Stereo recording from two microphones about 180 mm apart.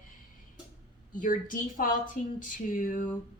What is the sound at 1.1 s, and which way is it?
A woman's voice, 50° left (ahead or behind).